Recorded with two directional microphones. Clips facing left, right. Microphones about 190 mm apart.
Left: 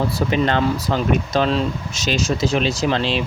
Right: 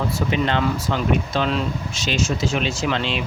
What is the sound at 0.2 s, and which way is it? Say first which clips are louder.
Speech: left 2 dB; 40° left (ahead or behind).